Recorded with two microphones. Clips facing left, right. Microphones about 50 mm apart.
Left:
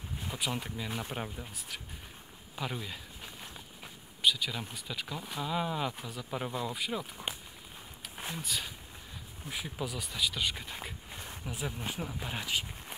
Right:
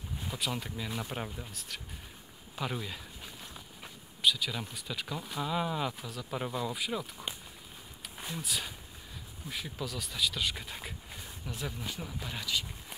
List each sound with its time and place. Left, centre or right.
0.2 s speech: centre
4.2 s speech: centre
8.4 s speech: centre
9.5 s speech: centre; by 12.9 s left